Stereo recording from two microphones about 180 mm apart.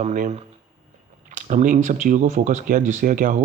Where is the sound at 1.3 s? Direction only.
45° right (ahead or behind).